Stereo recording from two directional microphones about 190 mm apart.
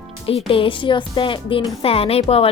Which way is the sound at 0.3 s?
30° left (ahead or behind).